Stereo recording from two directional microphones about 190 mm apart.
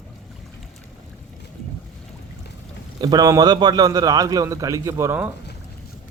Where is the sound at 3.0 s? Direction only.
20° right (ahead or behind).